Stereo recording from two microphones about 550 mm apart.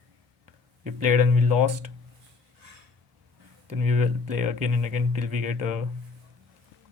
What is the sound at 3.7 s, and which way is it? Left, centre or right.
Speech, right.